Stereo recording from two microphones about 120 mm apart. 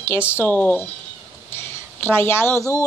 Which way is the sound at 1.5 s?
20° left (ahead or behind).